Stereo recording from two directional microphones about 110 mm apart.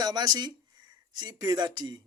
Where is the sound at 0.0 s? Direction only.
40° right (ahead or behind).